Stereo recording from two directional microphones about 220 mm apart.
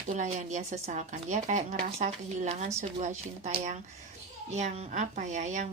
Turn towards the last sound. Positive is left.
turn(degrees=-30)  # may be behind; listen again after turning